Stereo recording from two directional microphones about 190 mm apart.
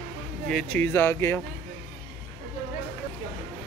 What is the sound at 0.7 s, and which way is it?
Speech, 10° left (ahead or behind).